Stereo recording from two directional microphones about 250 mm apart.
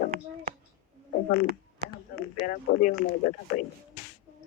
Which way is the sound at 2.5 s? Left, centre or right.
Left.